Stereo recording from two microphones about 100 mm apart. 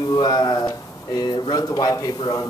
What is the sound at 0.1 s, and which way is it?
Speech, 45° left (ahead or behind).